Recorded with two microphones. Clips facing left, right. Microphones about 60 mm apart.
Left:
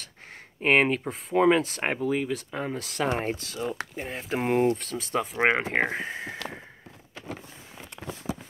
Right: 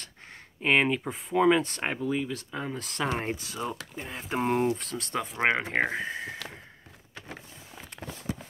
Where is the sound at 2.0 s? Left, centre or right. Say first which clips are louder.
Left 3 dB; left.